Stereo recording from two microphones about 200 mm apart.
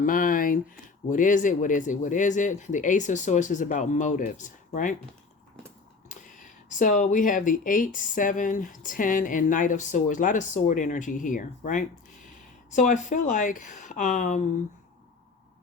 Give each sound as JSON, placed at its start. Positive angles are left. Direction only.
{"t": 0.0, "sound": "speech", "side_deg": 40}
{"t": 6.1, "sound": "speech", "side_deg": 40}